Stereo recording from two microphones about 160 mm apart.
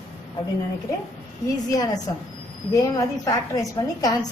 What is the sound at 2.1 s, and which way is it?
A woman's voice, 20° left (ahead or behind).